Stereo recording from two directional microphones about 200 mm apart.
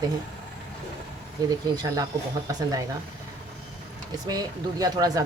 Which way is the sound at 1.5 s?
20° right (ahead or behind).